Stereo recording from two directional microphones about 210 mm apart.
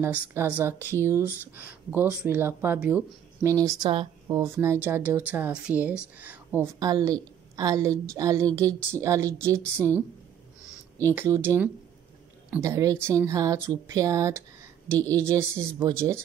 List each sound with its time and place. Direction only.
0.0 s a woman's voice: 10° right (ahead or behind)